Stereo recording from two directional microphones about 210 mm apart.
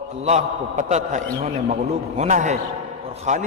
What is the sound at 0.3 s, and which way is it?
A man's voice, 35° right (ahead or behind).